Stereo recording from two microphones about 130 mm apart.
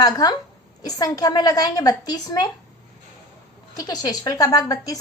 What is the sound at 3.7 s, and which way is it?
A woman's voice, 30° left (ahead or behind).